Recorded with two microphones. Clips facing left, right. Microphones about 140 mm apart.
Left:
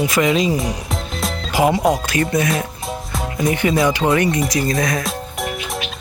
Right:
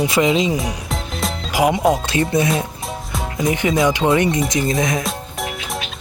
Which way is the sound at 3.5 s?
20° right (ahead or behind).